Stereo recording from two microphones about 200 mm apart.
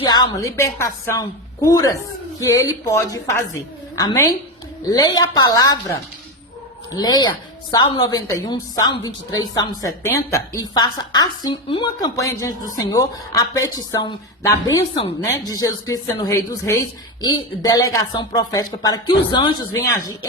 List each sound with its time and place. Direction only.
0.1 s a woman's voice: 20° left (ahead or behind)